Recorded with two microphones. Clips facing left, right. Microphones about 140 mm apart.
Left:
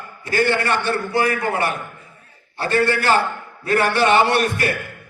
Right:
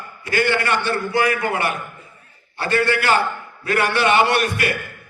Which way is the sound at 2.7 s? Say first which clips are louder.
Left 1 dB; 35° left (ahead or behind).